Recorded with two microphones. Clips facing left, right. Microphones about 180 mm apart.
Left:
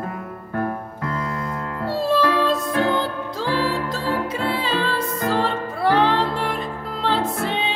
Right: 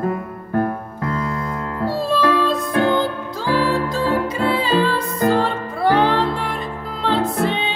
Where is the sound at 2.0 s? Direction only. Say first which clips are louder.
Even; centre (ahead or behind).